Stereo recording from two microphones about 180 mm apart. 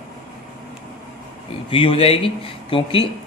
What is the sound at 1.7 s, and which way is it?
Speech, 30° left (ahead or behind).